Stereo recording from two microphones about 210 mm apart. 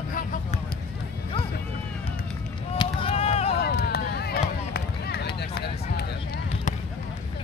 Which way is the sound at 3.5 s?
50° left (ahead or behind).